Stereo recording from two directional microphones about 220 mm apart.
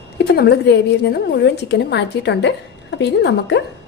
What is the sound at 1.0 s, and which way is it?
A woman's voice, 50° left (ahead or behind).